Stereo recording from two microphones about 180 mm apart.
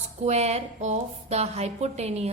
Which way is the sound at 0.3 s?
35° right (ahead or behind).